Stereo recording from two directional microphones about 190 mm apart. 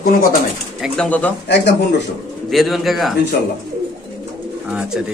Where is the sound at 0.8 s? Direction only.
5° left (ahead or behind).